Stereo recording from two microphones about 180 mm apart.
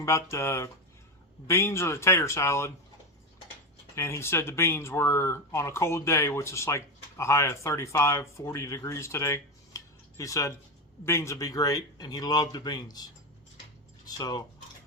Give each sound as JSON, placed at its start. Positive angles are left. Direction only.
{"t": 0.0, "sound": "speech", "side_deg": 15}
{"t": 3.9, "sound": "speech", "side_deg": 15}